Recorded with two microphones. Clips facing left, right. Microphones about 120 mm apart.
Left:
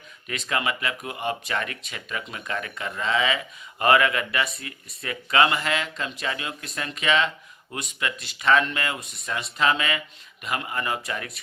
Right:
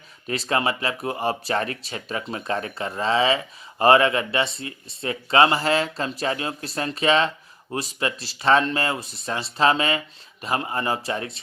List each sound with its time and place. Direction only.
0.3 s speech: 35° right (ahead or behind)